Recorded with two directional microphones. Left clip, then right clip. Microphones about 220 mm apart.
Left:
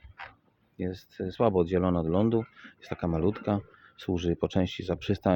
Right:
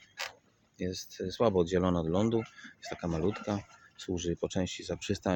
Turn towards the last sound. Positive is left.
turn(degrees=25)  # may be behind; listen again after turning